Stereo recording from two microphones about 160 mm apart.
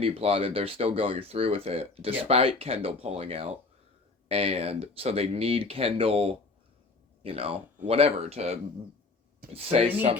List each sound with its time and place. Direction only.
0.0 s speech: 35° right (ahead or behind)